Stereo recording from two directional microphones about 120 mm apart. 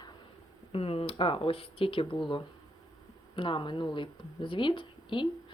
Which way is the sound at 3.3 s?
45° left (ahead or behind).